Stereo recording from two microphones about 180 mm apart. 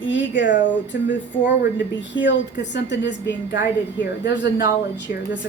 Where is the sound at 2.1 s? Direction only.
80° left.